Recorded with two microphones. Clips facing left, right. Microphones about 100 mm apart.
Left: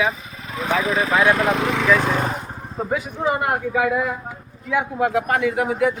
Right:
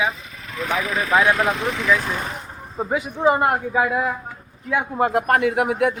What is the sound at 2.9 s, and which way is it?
Speech, 30° right (ahead or behind).